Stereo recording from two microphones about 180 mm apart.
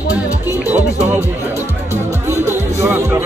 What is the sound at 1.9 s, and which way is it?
Music, 15° right (ahead or behind).